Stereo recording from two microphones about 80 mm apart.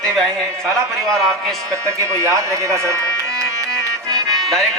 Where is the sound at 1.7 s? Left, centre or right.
Right.